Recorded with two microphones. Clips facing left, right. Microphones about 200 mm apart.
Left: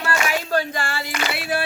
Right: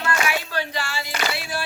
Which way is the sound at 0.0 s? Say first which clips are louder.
Left 1 dB; 40° left (ahead or behind).